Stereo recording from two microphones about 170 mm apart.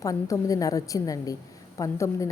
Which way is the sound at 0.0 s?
20° left (ahead or behind).